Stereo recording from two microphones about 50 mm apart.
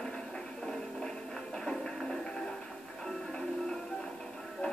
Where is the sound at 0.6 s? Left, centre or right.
Centre.